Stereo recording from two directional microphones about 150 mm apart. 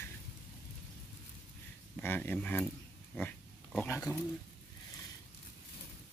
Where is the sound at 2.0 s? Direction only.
15° left (ahead or behind).